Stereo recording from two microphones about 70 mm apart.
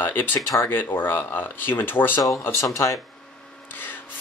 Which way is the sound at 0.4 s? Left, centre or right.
Left.